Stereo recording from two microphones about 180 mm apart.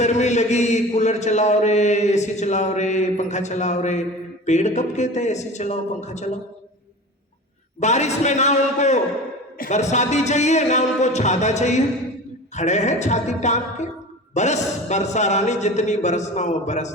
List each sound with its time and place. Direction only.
0.0 s mantra: 40° left (ahead or behind)
7.8 s mantra: 40° left (ahead or behind)